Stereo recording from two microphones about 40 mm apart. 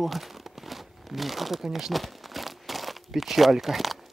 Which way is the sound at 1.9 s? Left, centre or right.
Centre.